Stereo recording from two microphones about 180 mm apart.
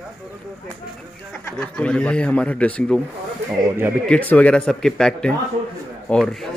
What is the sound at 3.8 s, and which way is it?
Speech, 10° right (ahead or behind).